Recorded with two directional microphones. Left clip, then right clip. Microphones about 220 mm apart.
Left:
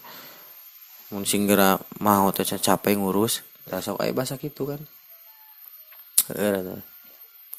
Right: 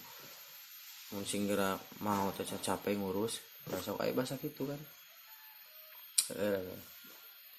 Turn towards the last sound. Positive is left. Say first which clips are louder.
# left 10 dB
turn(degrees=50)  # may be behind; listen again after turning